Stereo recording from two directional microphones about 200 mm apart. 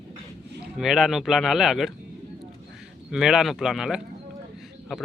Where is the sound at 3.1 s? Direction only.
Centre (ahead or behind).